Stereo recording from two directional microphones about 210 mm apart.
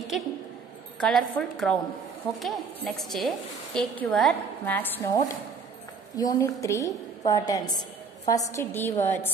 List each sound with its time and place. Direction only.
0.9 s a woman's voice: 5° left (ahead or behind)